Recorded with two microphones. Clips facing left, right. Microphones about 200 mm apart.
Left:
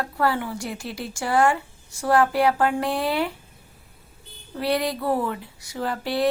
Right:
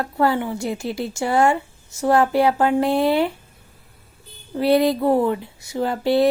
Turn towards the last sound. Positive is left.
turn(degrees=-25)  # may be behind; listen again after turning